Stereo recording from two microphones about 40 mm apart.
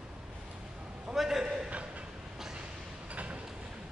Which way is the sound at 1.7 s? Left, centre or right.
Right.